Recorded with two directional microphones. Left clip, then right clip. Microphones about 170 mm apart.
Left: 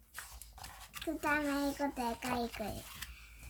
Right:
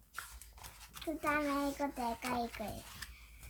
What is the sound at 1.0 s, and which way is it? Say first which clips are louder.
Speech: left 1 dB; 30° left (ahead or behind).